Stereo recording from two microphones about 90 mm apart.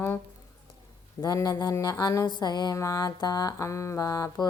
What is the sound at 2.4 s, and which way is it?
Mantra, 50° left (ahead or behind).